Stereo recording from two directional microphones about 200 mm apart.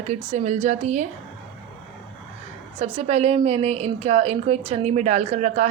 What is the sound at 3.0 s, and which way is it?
A woman's voice, 30° right (ahead or behind).